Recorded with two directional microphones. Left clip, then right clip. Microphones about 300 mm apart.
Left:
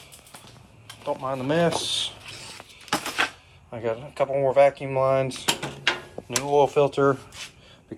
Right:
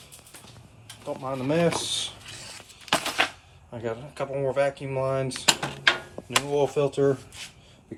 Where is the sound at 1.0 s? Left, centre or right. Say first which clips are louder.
Left 3 dB; centre.